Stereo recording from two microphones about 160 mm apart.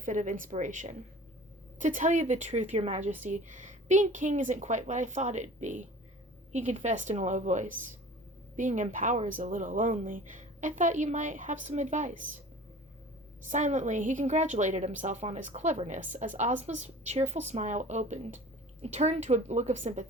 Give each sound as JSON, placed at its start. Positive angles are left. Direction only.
{"t": 0.0, "sound": "a woman's voice", "side_deg": -55}
{"t": 13.5, "sound": "a woman's voice", "side_deg": -50}